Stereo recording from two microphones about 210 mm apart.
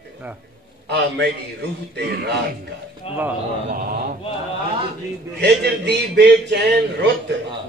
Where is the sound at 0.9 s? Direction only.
55° right (ahead or behind).